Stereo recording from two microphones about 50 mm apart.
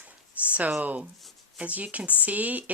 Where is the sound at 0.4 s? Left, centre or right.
Right.